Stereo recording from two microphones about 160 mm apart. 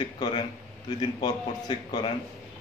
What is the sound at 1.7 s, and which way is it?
Speech, 25° left (ahead or behind).